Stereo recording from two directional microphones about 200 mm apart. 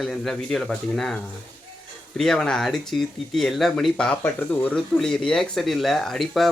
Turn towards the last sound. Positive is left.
turn(degrees=0)  # may be behind; listen again after turning